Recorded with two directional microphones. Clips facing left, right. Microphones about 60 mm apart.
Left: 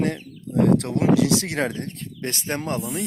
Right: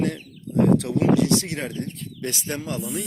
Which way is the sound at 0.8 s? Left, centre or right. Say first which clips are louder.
Even; left.